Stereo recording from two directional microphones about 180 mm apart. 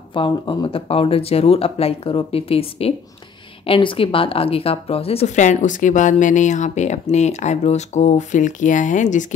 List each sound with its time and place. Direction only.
0.1 s speech: 25° left (ahead or behind); by 9.2 s 45° left (ahead or behind)